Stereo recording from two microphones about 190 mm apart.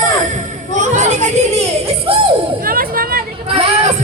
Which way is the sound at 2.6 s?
50° right (ahead or behind).